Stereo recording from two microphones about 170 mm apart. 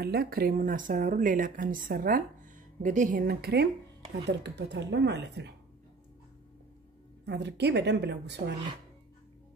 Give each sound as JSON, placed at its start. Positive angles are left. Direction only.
{"t": 0.0, "sound": "speech", "side_deg": -70}
{"t": 4.3, "sound": "speech", "side_deg": -85}
{"t": 7.2, "sound": "a woman's voice", "side_deg": -85}